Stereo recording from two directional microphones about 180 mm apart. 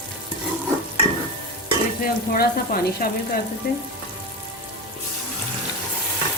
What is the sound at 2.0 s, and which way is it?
Speech, 55° left (ahead or behind).